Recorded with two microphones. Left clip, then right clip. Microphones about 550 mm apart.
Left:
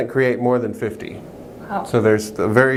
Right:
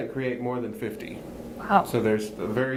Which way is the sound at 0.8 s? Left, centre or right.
Left.